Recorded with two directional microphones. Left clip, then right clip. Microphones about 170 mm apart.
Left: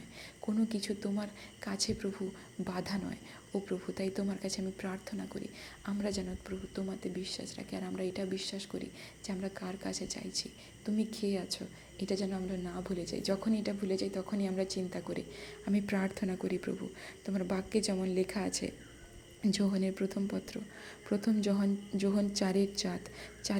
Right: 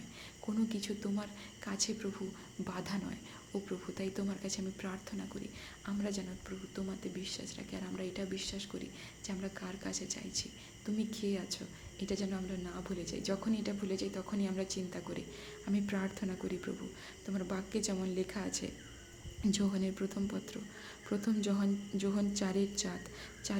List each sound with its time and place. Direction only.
0.4 s speech: 20° left (ahead or behind)